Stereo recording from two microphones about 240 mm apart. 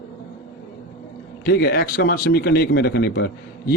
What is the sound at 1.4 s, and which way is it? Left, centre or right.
Speech, left.